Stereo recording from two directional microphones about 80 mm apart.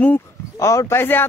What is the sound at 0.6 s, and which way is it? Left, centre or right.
Speech, left.